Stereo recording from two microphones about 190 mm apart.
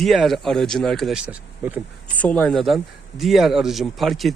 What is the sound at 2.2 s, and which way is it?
Speech, 5° left (ahead or behind).